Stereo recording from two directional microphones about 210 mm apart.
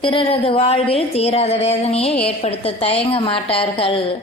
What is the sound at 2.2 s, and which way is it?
A woman's voice, 30° left (ahead or behind).